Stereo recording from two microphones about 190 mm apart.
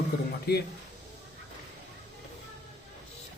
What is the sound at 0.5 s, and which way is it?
Speech, 60° left (ahead or behind).